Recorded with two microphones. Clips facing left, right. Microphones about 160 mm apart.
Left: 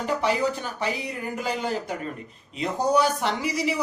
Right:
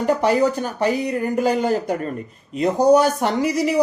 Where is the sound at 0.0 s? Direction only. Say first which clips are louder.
Right 7 dB; 45° right (ahead or behind).